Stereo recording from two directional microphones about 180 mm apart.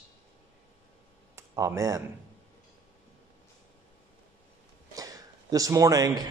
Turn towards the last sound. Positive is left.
turn(degrees=-20)  # may be behind; listen again after turning